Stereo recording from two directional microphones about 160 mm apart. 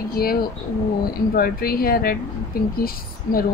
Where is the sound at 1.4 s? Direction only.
70° left (ahead or behind).